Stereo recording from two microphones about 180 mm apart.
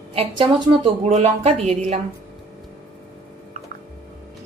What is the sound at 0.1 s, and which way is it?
A woman's voice, 35° right (ahead or behind).